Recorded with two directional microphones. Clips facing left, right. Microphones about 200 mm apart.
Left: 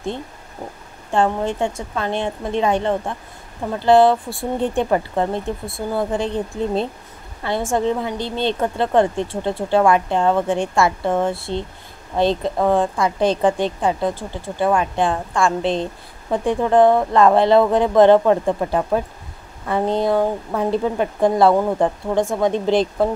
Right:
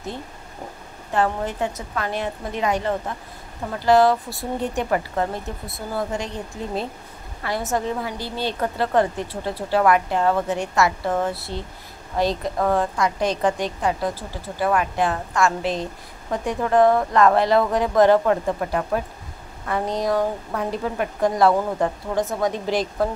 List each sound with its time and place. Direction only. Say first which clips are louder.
1.1 s a woman's voice: left 4 dB; 25° left (ahead or behind)